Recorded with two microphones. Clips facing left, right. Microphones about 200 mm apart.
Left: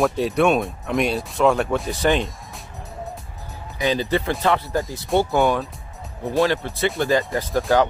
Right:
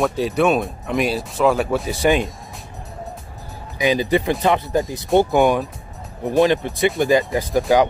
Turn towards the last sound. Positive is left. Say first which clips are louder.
# right 3 dB
turn(degrees=-15)  # may be behind; listen again after turning